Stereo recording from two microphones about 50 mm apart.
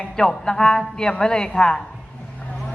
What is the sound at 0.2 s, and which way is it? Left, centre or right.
A woman's voice, centre.